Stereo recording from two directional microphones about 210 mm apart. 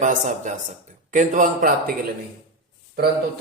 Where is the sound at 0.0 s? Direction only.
35° right (ahead or behind).